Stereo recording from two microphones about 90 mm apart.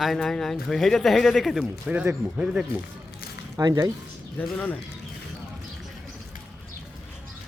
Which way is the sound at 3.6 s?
45° right (ahead or behind).